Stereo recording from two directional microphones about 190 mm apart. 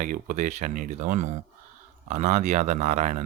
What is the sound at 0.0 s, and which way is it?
Speech, 40° right (ahead or behind).